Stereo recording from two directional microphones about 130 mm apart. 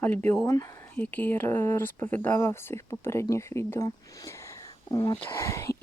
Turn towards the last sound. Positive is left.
turn(degrees=20)  # may be behind; listen again after turning